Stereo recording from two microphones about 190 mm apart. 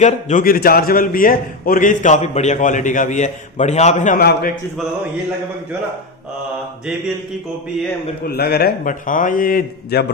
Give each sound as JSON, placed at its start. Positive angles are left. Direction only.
{"t": 0.0, "sound": "a man's voice", "side_deg": 45}
{"t": 8.3, "sound": "a man's voice", "side_deg": 55}